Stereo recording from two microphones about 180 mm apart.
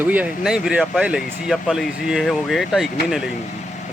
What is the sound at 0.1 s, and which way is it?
Speech, 5° right (ahead or behind).